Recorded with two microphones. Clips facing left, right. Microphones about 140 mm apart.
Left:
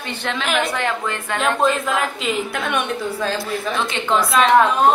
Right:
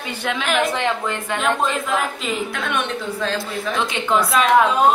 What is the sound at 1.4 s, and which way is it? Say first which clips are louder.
A woman's voice: left 3 dB; centre (ahead or behind).